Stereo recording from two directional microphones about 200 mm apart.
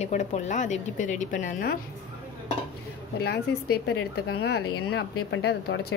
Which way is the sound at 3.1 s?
55° left (ahead or behind).